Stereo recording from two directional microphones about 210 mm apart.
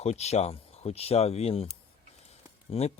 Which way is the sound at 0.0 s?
30° left (ahead or behind).